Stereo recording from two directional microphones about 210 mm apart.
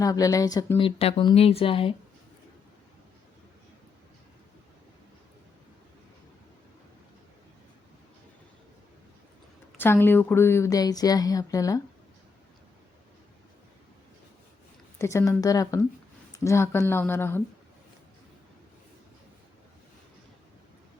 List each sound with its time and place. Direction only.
0.0 s speech: 15° left (ahead or behind)
9.7 s a woman's voice: 10° left (ahead or behind)
14.9 s a woman's voice: 15° left (ahead or behind)